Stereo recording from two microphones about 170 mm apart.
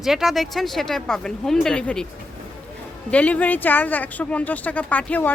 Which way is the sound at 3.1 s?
10° left (ahead or behind).